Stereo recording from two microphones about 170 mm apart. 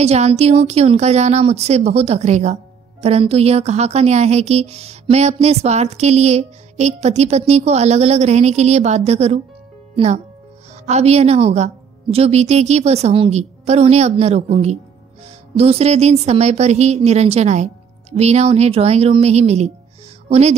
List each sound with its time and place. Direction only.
0.0 s a woman's voice: 40° right (ahead or behind)